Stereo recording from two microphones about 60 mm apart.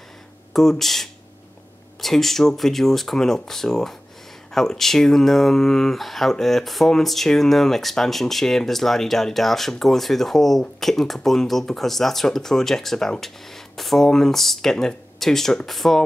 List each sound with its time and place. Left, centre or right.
0.5 s speech: centre